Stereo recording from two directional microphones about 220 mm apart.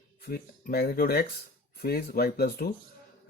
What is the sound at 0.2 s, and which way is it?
Speech, 45° left (ahead or behind).